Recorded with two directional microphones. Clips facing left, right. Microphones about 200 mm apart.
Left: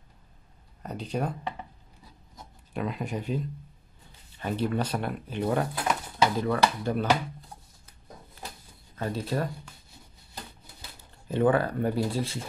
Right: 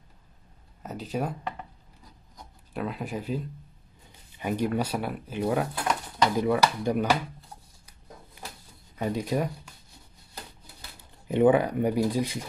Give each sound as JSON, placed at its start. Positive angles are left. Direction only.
{"t": 0.8, "sound": "speech", "side_deg": -5}
{"t": 2.3, "sound": "a sound", "side_deg": 0}
{"t": 4.4, "sound": "speech", "side_deg": -10}
{"t": 6.3, "sound": "speech", "side_deg": -15}
{"t": 8.9, "sound": "speech", "side_deg": -15}
{"t": 11.2, "sound": "speech", "side_deg": -15}